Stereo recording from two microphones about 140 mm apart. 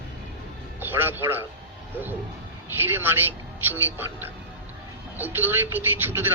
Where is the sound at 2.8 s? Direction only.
15° right (ahead or behind).